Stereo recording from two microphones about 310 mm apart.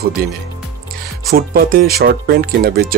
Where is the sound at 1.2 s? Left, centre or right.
Right.